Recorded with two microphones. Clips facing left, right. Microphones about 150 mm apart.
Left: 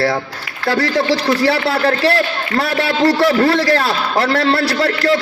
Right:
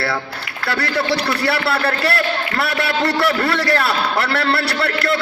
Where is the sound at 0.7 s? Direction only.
35° left (ahead or behind).